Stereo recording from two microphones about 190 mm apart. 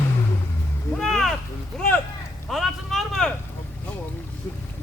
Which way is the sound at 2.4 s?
Centre (ahead or behind).